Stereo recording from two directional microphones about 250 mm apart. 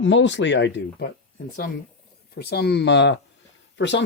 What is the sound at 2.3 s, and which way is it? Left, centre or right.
Speech, left.